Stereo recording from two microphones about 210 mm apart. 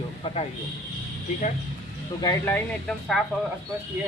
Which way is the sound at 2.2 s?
15° left (ahead or behind).